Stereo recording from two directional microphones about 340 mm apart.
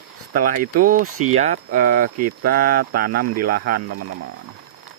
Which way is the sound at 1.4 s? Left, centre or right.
Right.